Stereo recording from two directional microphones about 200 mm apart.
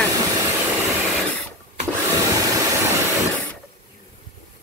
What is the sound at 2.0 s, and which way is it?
Vacuum cleaner, 15° right (ahead or behind).